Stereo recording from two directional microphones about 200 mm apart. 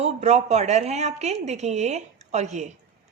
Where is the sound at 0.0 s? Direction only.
35° right (ahead or behind).